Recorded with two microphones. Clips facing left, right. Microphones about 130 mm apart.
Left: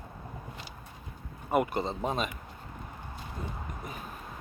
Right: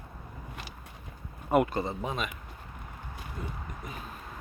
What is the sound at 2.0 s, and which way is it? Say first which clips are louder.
Speech: left 3 dB; 35° left (ahead or behind).